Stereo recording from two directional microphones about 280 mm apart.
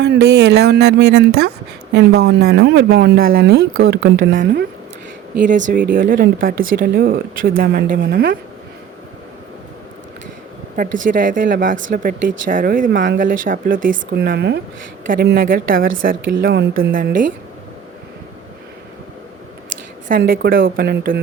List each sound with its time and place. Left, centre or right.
0.0 s speech: right
5.4 s speech: right
10.8 s speech: right
20.1 s speech: right